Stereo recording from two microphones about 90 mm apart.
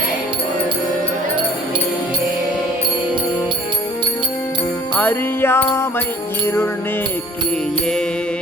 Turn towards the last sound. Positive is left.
turn(degrees=25)  # may be behind; listen again after turning